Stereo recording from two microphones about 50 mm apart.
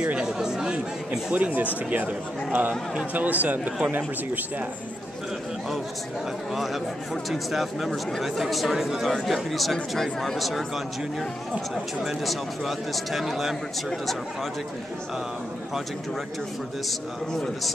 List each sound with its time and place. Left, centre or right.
0.0 s chatter: right
0.4 s chatter: centre
1.3 s speech: right
6.5 s speech: centre
9.0 s speech: centre
17.3 s a man's voice: centre